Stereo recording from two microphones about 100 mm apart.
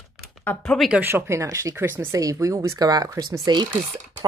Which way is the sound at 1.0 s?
25° right (ahead or behind).